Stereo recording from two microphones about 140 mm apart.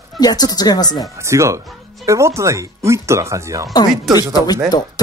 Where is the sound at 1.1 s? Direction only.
20° right (ahead or behind).